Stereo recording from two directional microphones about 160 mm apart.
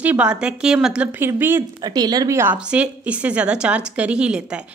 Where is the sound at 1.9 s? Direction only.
25° right (ahead or behind).